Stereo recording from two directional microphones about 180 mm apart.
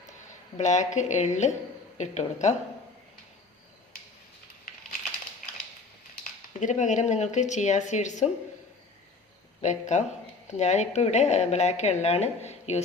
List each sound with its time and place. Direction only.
0.5 s speech: 40° left (ahead or behind)
6.6 s speech: 45° left (ahead or behind)
9.6 s speech: 40° left (ahead or behind)